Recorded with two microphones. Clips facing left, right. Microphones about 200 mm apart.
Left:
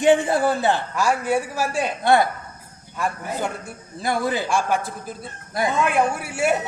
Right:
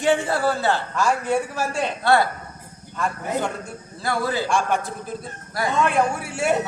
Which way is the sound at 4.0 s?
20° left (ahead or behind).